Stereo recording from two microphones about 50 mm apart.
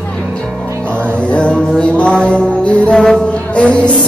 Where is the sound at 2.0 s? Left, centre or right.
Left.